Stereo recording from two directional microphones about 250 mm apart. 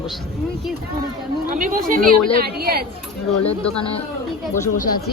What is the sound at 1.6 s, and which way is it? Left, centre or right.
Speech, right.